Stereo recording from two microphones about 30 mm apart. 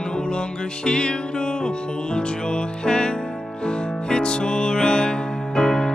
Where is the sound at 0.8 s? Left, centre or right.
Left.